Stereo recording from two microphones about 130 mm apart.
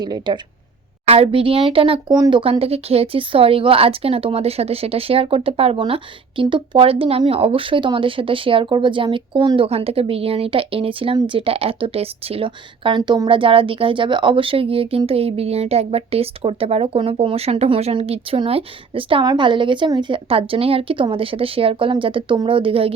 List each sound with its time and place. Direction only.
0.0 s speech: 35° right (ahead or behind)
1.0 s speech: 50° right (ahead or behind)
2.0 s speech: 30° right (ahead or behind)
2.4 s speech: 50° right (ahead or behind)
9.6 s speech: 50° right (ahead or behind)
13.0 s speech: 30° right (ahead or behind)
13.2 s speech: 40° right (ahead or behind)